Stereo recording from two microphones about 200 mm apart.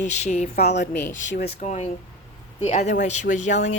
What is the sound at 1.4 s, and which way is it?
A woman's voice, 35° left (ahead or behind).